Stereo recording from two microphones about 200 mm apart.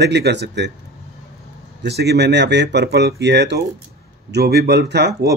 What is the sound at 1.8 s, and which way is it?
Speech, 55° right (ahead or behind).